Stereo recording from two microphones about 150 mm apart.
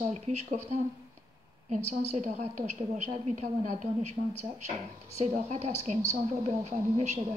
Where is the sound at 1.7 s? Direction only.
50° right (ahead or behind).